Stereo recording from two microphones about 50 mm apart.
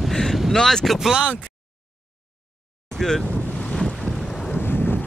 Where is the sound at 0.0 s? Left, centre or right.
Centre.